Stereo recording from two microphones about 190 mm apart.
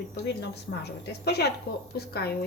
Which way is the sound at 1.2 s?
60° left (ahead or behind).